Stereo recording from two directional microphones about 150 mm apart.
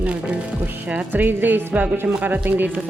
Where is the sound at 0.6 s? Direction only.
10° right (ahead or behind).